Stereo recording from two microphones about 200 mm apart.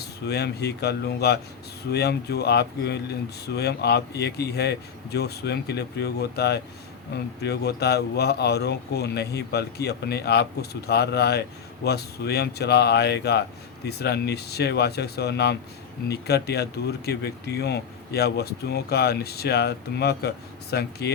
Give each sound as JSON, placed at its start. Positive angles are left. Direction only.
{"t": 0.0, "sound": "speech", "side_deg": 55}